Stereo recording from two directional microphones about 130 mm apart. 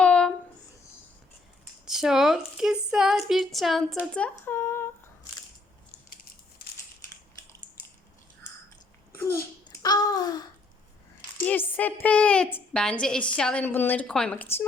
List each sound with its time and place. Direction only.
0.0 s a sound: 10° left (ahead or behind)
1.8 s speech: 5° right (ahead or behind); by 4.9 s 20° left (ahead or behind)
9.8 s babbling: 30° left (ahead or behind)
11.3 s a woman's voice: 15° left (ahead or behind)